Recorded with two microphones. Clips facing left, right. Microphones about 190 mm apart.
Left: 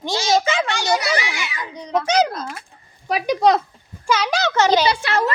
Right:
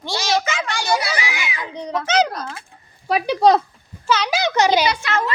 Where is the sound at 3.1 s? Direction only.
30° right (ahead or behind).